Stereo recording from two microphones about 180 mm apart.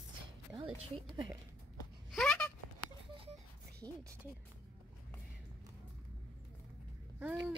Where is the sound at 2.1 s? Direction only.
5° left (ahead or behind).